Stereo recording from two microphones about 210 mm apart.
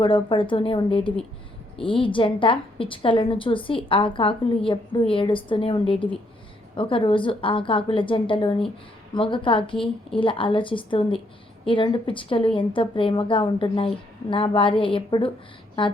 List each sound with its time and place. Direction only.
0.0 s a woman's voice: 25° left (ahead or behind)